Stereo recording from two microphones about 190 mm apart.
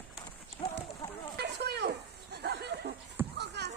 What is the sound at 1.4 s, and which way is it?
Snake, 60° right (ahead or behind).